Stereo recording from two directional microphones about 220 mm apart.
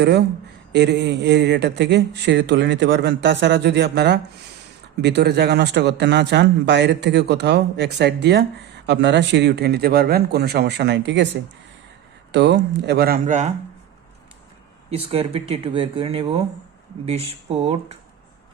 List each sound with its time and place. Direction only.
0.7 s speech: 50° right (ahead or behind)
12.3 s speech: 50° right (ahead or behind); by 13.5 s 35° right (ahead or behind)
14.8 s speech: 25° right (ahead or behind)